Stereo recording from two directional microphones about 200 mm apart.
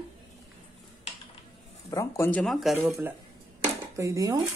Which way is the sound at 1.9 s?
15° left (ahead or behind).